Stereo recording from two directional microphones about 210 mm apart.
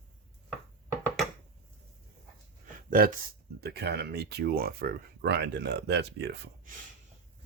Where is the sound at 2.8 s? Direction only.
40° right (ahead or behind).